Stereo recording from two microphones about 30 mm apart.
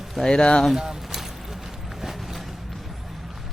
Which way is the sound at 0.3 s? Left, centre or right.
Left.